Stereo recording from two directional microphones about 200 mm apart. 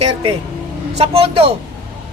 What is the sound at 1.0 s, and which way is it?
Speech, 30° right (ahead or behind).